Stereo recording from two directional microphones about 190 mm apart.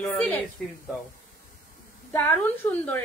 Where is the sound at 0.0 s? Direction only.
10° left (ahead or behind).